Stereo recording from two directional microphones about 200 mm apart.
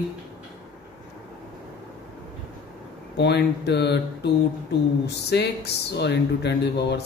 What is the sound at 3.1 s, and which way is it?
Speech, 60° left (ahead or behind).